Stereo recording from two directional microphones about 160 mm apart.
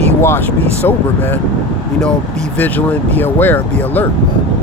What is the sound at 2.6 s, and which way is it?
Speech, 10° left (ahead or behind).